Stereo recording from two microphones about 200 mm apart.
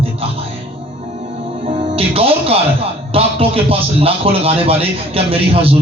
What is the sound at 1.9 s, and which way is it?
A man's voice, 30° right (ahead or behind).